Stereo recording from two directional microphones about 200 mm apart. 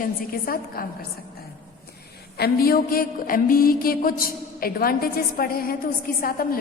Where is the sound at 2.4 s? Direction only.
50° left (ahead or behind).